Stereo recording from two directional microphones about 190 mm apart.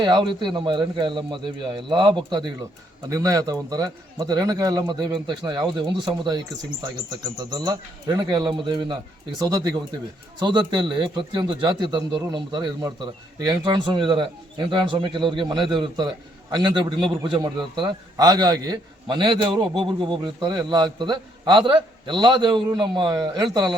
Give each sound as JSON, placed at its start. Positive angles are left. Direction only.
{"t": 0.0, "sound": "a man's voice", "side_deg": -25}
{"t": 7.5, "sound": "a man's voice", "side_deg": -20}